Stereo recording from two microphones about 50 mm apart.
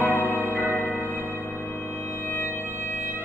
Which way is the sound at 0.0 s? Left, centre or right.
Left.